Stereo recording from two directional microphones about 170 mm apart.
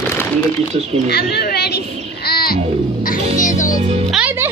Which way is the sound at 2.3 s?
60° left (ahead or behind).